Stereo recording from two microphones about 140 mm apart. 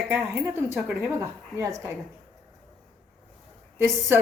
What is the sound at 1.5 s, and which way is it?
Speech, 20° right (ahead or behind).